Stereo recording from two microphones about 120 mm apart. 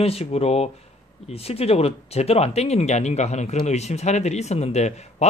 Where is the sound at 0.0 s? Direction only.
60° left (ahead or behind).